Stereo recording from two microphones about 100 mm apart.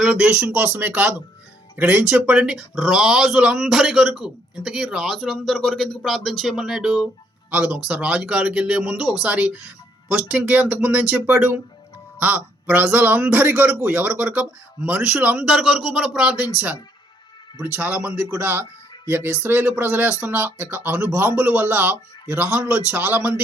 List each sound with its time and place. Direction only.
0.0 s speech: 5° right (ahead or behind)
7.5 s speech: 15° right (ahead or behind)
17.7 s speech: 15° right (ahead or behind)